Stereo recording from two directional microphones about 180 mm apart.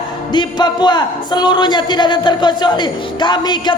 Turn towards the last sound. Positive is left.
turn(degrees=25)  # may be behind; listen again after turning